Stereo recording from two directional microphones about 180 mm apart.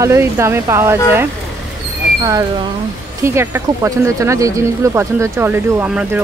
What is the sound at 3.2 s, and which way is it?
Speech, 15° right (ahead or behind).